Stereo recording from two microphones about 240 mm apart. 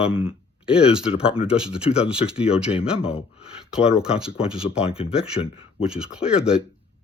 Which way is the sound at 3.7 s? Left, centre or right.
Centre.